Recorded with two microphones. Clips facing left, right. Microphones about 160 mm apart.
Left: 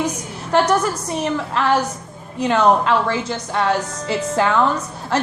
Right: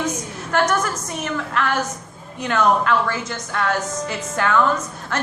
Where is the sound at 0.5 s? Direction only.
30° left (ahead or behind).